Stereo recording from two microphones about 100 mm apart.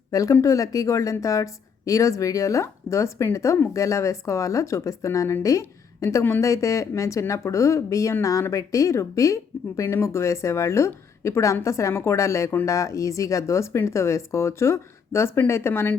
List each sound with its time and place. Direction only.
0.1 s a woman's voice: 35° left (ahead or behind)